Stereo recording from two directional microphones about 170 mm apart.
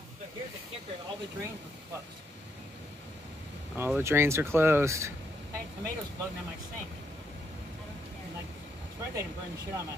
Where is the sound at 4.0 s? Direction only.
15° right (ahead or behind).